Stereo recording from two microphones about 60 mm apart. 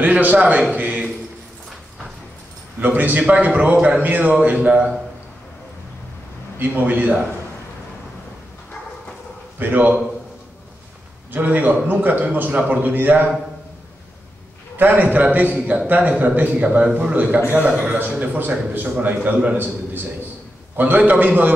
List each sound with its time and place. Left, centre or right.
0.0 s a man's voice: right
2.8 s a man's voice: right
6.6 s a man's voice: right
9.6 s a man's voice: right
11.3 s a man's voice: right
14.8 s a man's voice: right